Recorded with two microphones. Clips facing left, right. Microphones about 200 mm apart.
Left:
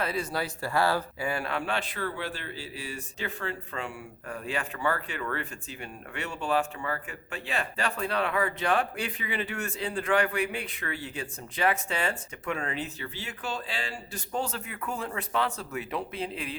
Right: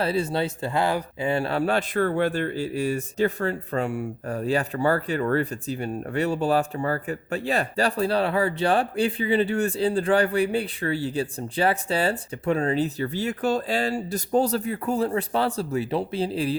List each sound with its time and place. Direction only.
0.0 s a man's voice: 30° right (ahead or behind)